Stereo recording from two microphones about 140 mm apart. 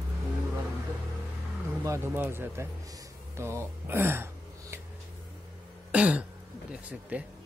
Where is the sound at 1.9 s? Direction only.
15° right (ahead or behind).